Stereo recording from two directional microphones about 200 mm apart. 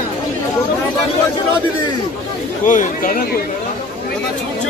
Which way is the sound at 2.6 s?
40° left (ahead or behind).